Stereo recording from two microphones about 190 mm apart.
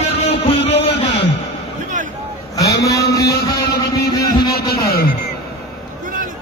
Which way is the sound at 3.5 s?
55° left (ahead or behind).